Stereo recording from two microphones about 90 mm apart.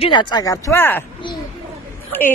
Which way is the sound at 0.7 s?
25° left (ahead or behind).